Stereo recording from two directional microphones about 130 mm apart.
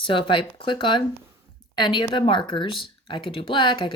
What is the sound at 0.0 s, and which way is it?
Speech, 40° left (ahead or behind).